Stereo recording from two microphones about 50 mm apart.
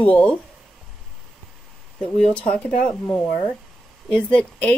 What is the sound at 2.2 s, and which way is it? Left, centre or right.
Speech, left.